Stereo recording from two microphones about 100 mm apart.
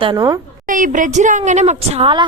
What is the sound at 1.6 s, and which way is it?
Speech, 65° right (ahead or behind).